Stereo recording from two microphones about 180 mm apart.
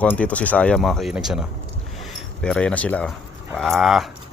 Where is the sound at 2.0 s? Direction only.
Centre (ahead or behind).